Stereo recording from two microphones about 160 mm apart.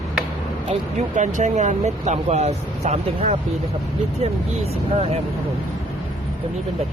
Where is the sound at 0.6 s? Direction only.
45° right (ahead or behind).